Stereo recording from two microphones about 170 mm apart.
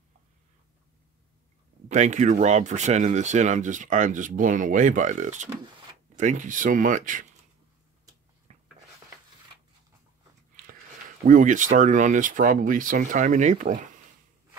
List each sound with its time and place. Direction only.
1.9 s speech: 45° right (ahead or behind)
8.5 s a sound: 40° right (ahead or behind)
11.2 s speech: 50° right (ahead or behind)